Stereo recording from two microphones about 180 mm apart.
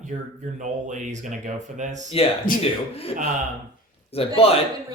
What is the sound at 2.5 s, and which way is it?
Speech, 50° left (ahead or behind).